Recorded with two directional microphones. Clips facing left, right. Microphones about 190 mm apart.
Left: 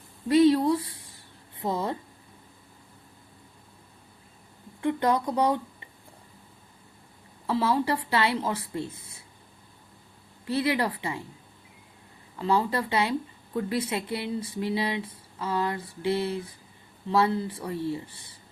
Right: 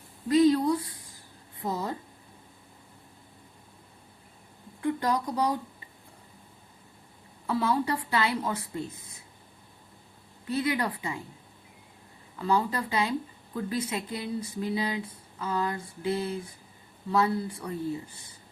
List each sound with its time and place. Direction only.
0.3 s speech: 25° left (ahead or behind)
4.8 s a sound: 25° left (ahead or behind)
7.4 s speech: 25° left (ahead or behind)
10.5 s speech: 30° left (ahead or behind)
12.4 s speech: 30° left (ahead or behind)